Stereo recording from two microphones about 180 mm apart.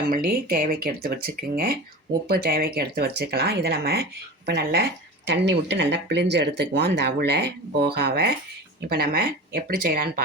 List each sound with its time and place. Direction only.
0.1 s speech: 55° right (ahead or behind)